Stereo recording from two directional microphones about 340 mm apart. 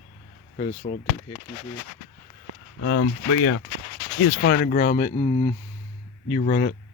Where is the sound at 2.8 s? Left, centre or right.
Left.